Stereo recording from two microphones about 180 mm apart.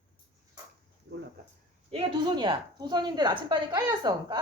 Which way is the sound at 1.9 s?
30° right (ahead or behind).